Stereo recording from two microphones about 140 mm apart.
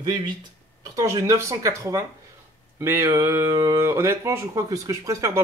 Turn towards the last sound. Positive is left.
turn(degrees=-20)  # may be behind; listen again after turning